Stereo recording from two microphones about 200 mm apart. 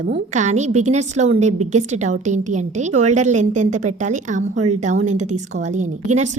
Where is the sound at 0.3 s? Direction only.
35° right (ahead or behind).